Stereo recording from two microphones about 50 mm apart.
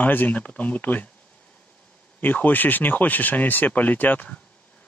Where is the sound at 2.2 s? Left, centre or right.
Left.